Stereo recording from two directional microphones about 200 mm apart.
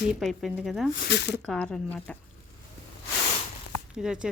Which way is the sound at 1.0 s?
60° left (ahead or behind).